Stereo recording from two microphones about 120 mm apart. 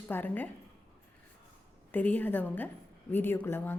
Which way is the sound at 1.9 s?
15° left (ahead or behind).